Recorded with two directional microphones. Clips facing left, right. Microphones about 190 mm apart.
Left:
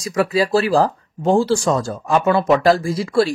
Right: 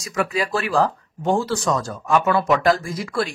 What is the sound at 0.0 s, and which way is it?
Speech, 30° left (ahead or behind).